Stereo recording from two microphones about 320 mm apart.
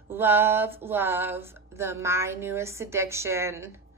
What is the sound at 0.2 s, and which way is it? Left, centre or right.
A woman's voice, centre.